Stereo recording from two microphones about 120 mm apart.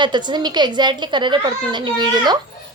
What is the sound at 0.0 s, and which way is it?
A woman's voice, 40° right (ahead or behind).